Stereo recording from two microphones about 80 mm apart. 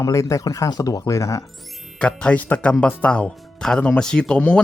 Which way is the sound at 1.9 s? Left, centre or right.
Centre.